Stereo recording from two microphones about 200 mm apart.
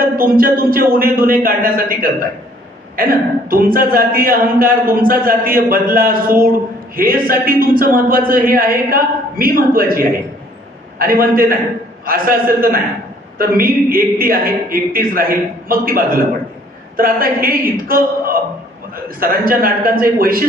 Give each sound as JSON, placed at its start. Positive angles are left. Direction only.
{"t": 0.0, "sound": "a man's voice", "side_deg": -45}